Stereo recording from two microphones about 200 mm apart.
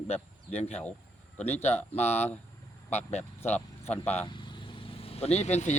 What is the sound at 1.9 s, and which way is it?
Speech, 35° left (ahead or behind).